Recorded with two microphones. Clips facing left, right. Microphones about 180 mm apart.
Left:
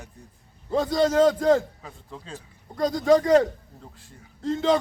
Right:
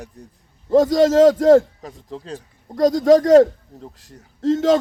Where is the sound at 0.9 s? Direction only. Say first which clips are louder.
Right 2 dB; 90° right.